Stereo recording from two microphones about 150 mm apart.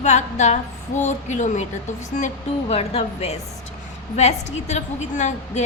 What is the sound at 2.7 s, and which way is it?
A woman's voice, 45° left (ahead or behind).